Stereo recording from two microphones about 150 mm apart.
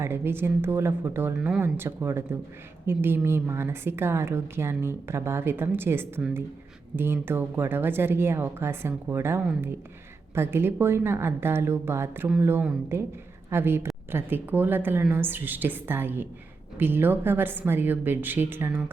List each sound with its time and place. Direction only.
0.0 s a woman's voice: 15° right (ahead or behind)